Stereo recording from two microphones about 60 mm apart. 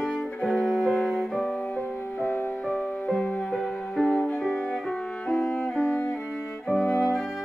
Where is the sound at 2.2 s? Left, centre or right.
Left.